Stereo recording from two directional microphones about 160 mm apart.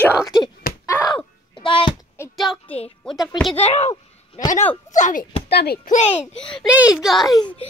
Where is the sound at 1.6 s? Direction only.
30° left (ahead or behind).